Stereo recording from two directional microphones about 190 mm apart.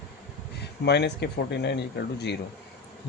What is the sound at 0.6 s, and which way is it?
Speech, 60° left (ahead or behind).